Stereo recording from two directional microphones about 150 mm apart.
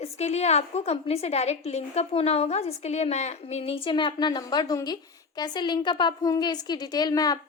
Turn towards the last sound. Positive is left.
turn(degrees=25)  # may be behind; listen again after turning